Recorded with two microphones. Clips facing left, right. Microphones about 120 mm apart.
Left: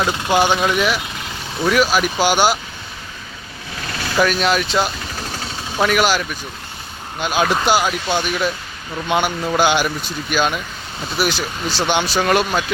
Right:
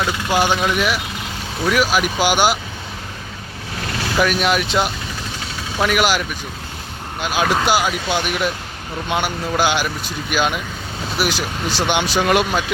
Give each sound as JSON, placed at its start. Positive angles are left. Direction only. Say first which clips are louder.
{"t": 0.0, "sound": "speech", "louder": "left 2 dB", "side_deg": 20}
{"t": 0.7, "sound": "speech", "louder": "left 1 dB", "side_deg": -5}
{"t": 4.2, "sound": "speech", "louder": "left 1 dB", "side_deg": -10}
{"t": 9.0, "sound": "speech", "louder": "left 3 dB", "side_deg": 0}